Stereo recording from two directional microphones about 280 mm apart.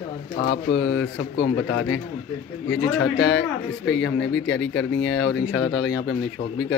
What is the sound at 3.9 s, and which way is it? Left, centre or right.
Speech, left.